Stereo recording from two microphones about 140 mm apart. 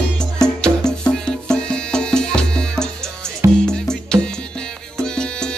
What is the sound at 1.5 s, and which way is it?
Music, 5° left (ahead or behind).